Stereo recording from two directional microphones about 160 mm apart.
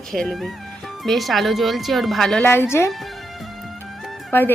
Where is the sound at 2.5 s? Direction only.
15° left (ahead or behind).